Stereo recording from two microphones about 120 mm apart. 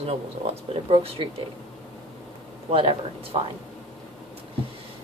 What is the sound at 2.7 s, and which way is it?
Speech, 50° right (ahead or behind).